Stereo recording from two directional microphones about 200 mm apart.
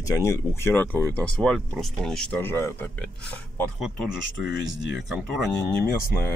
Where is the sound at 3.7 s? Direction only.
Centre (ahead or behind).